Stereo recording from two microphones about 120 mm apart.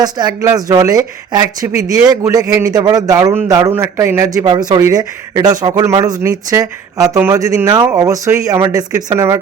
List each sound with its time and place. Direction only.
0.0 s a man's voice: 35° right (ahead or behind)
4.4 s a man's voice: 35° right (ahead or behind)